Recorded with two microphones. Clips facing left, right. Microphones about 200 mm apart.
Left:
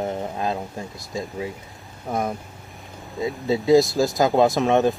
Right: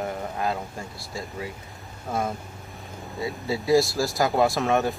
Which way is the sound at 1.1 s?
20° left (ahead or behind).